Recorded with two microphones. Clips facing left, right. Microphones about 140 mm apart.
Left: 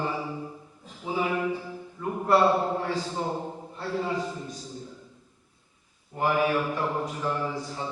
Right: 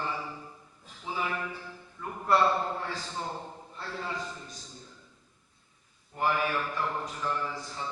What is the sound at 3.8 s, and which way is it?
Speech, 15° left (ahead or behind).